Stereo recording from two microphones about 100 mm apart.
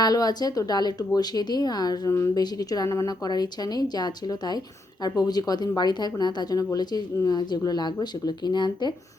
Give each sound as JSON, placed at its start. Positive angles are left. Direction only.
{"t": 0.0, "sound": "speech", "side_deg": 40}